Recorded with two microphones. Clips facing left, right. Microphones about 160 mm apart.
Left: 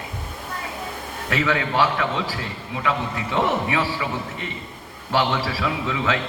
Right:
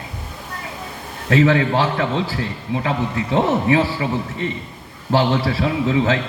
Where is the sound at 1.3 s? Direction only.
30° right (ahead or behind).